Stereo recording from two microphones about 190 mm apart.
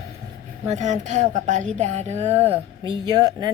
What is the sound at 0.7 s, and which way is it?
A woman's voice, 40° right (ahead or behind).